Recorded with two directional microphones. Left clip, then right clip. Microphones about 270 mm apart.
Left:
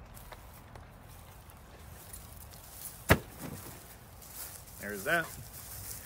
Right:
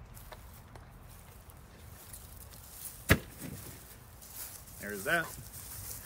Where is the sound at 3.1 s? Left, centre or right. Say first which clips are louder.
Left 2 dB; centre.